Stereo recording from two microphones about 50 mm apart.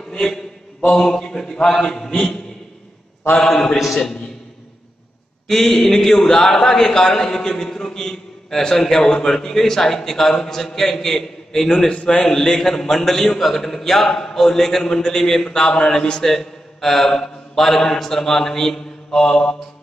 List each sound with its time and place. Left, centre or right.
0.1 s a man's voice: centre
5.5 s a man's voice: centre
11.9 s a man's voice: left
12.3 s a man's voice: centre